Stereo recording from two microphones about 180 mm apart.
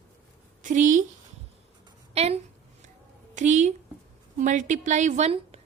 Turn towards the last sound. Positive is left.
turn(degrees=-35)  # may be behind; listen again after turning